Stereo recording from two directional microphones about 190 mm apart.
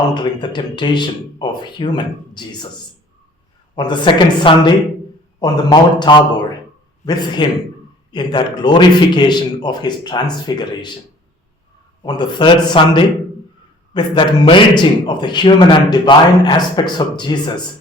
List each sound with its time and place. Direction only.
0.1 s a man's voice: 25° left (ahead or behind)
3.8 s a man's voice: 25° left (ahead or behind)
12.0 s a man's voice: 25° left (ahead or behind)